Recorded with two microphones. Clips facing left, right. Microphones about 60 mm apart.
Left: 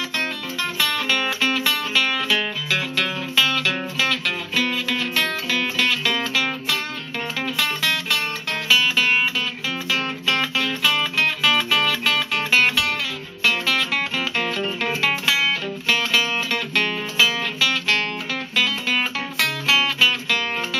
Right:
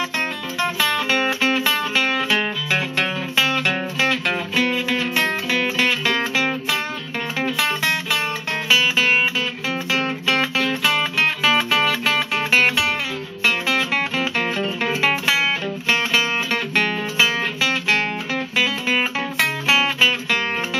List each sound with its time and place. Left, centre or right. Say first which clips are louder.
0.6 s music: right 4 dB; centre